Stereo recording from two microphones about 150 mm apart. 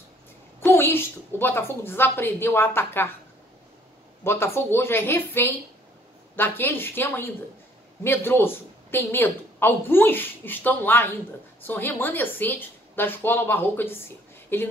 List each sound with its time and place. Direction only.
0.6 s a woman's voice: 15° left (ahead or behind)
4.2 s a woman's voice: 15° left (ahead or behind)